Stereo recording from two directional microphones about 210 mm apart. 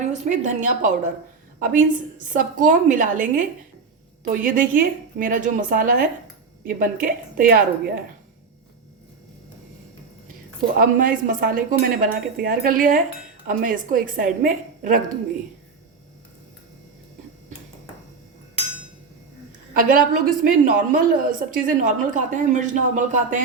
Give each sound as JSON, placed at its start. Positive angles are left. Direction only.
{"t": 0.1, "sound": "a woman's voice", "side_deg": -35}
{"t": 10.8, "sound": "a woman's voice", "side_deg": -40}
{"t": 19.7, "sound": "a woman's voice", "side_deg": -40}